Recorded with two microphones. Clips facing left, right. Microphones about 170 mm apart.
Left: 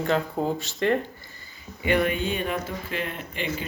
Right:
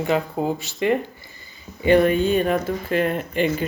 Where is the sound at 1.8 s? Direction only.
35° right (ahead or behind).